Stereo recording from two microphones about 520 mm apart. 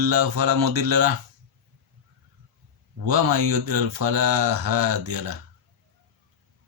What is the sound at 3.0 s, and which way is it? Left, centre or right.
Speech, right.